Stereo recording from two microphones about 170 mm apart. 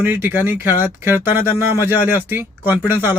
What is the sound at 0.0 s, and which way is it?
Speech, 10° right (ahead or behind).